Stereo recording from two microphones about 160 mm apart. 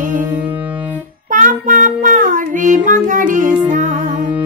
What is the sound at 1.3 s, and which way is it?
Child singing, 55° right (ahead or behind).